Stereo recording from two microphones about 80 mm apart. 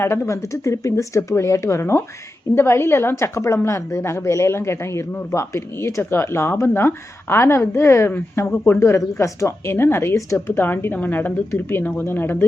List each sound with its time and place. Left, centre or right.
0.0 s a woman's voice: left